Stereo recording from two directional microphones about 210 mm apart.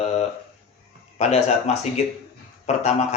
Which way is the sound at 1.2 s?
30° left (ahead or behind).